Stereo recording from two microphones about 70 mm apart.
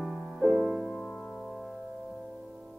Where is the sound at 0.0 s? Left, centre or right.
Centre.